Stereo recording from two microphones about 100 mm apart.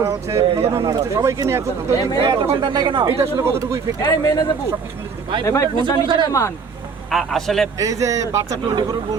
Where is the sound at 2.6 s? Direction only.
55° right (ahead or behind).